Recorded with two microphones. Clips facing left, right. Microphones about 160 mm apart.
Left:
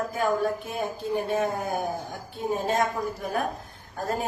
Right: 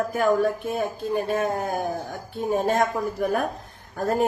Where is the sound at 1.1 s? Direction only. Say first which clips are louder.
Right 1 dB; 90° right.